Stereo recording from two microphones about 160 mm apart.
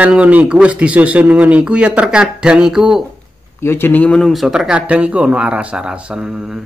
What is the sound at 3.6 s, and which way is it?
Speech, 15° left (ahead or behind).